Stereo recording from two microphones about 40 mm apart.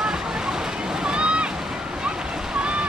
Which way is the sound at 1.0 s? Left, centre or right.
Right.